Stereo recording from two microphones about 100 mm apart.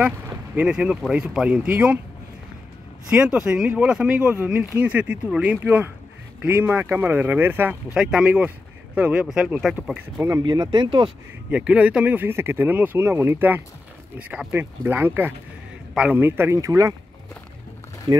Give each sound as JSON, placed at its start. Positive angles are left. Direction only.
{"t": 0.6, "sound": "speech", "side_deg": -10}
{"t": 3.1, "sound": "speech", "side_deg": -10}
{"t": 7.9, "sound": "speech", "side_deg": -10}
{"t": 10.4, "sound": "speech", "side_deg": -45}
{"t": 11.5, "sound": "speech", "side_deg": -10}
{"t": 18.1, "sound": "speech", "side_deg": -50}